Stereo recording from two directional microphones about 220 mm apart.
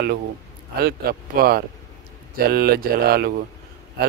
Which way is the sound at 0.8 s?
45° right (ahead or behind).